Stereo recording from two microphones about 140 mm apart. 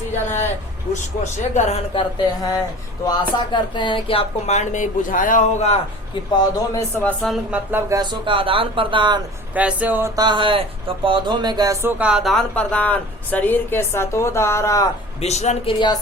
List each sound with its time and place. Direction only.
1.2 s speech: 55° left (ahead or behind)
2.0 s a sound: 25° left (ahead or behind)
3.1 s speech: 30° left (ahead or behind); by 5.8 s 50° left (ahead or behind)
6.3 s a sound: 30° left (ahead or behind)
7.2 s speech: centre (ahead or behind)
7.7 s speech: 15° right (ahead or behind)
7.9 s speech: 35° right (ahead or behind)
9.6 s speech: 10° right (ahead or behind)
10.2 s speech: 35° right (ahead or behind); by 14.8 s 20° left (ahead or behind)
15.2 s speech: 50° left (ahead or behind)